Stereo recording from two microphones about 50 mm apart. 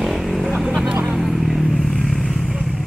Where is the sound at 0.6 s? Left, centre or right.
Centre.